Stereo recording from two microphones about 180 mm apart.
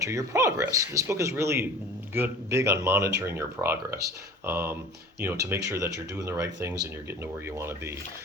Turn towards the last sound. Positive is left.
turn(degrees=-15)  # may be behind; listen again after turning